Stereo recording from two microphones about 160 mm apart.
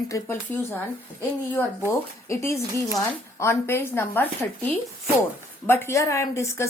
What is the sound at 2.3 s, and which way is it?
A woman's voice, 15° left (ahead or behind).